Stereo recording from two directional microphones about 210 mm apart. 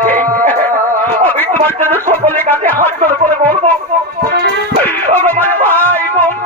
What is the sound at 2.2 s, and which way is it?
Speech, 10° left (ahead or behind).